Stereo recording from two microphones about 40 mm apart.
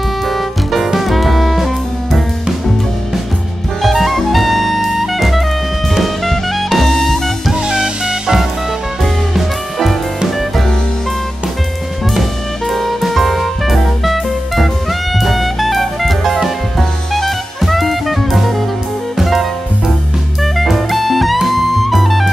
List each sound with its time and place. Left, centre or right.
0.3 s music: centre
3.8 s jazz: centre
5.9 s music: centre
7.5 s music: centre
9.0 s music: centre
12.2 s music: centre
16.3 s jazz: centre
19.1 s music: centre
20.5 s music: centre